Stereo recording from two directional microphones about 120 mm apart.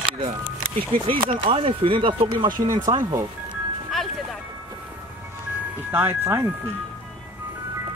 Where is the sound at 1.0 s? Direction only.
45° right (ahead or behind).